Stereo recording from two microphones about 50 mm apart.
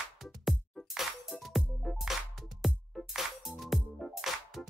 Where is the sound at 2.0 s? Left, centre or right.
Centre.